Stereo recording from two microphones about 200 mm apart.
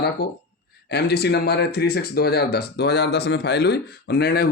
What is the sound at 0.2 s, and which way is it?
Speech, 50° left (ahead or behind).